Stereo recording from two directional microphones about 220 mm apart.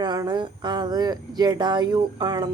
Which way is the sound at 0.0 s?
20° right (ahead or behind).